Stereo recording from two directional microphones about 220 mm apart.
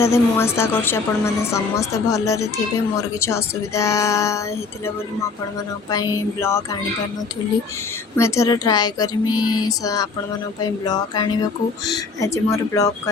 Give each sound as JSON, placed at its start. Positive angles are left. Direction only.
{"t": 0.0, "sound": "a woman's voice", "side_deg": 10}
{"t": 5.9, "sound": "a woman's voice", "side_deg": 15}
{"t": 8.1, "sound": "a woman's voice", "side_deg": 15}
{"t": 9.3, "sound": "a sound", "side_deg": 80}
{"t": 9.6, "sound": "a woman's voice", "side_deg": 15}